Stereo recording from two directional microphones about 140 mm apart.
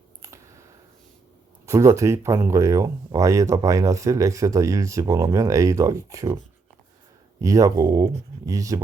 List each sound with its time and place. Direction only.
0.2 s a sound: 20° right (ahead or behind)
1.6 s speech: 20° right (ahead or behind)
7.4 s speech: 25° right (ahead or behind)